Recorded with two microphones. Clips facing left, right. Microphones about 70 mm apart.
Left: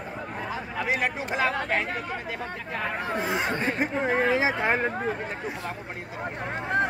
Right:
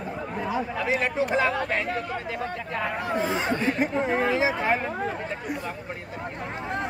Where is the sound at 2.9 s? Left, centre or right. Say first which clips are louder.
Right 1 dB; centre.